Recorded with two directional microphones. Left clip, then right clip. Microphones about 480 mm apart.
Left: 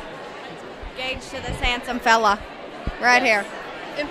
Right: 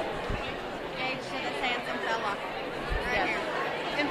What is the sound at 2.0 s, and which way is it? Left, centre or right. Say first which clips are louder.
Speech: left 16 dB; left.